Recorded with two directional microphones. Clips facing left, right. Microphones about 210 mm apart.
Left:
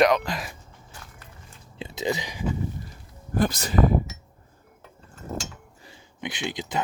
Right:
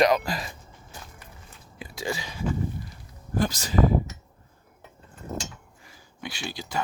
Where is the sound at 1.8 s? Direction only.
25° left (ahead or behind).